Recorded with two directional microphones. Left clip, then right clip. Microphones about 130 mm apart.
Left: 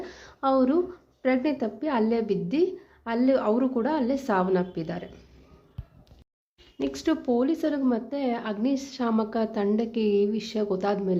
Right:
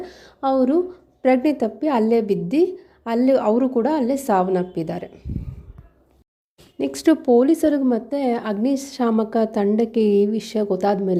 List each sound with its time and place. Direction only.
0.0 s a woman's voice: 25° right (ahead or behind)
1.2 s a woman's voice: 45° right (ahead or behind)
6.7 s a woman's voice: 55° right (ahead or behind)